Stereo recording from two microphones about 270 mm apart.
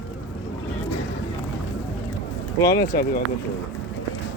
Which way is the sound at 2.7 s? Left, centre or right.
Left.